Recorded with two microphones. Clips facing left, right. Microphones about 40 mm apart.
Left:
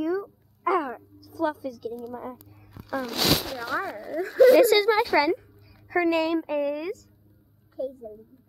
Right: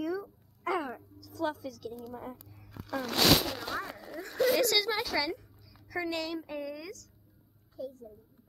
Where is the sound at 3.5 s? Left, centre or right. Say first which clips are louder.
Left 7 dB; left.